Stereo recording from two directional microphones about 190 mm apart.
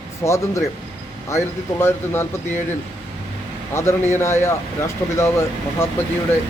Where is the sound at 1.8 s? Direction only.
10° left (ahead or behind).